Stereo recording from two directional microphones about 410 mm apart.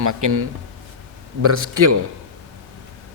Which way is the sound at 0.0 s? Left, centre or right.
Right.